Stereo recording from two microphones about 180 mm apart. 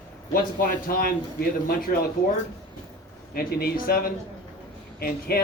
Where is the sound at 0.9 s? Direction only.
55° left (ahead or behind).